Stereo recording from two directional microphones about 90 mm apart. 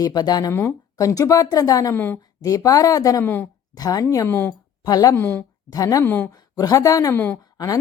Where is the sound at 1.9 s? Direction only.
20° left (ahead or behind).